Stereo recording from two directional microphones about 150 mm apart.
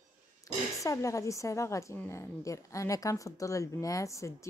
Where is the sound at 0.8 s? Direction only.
20° left (ahead or behind).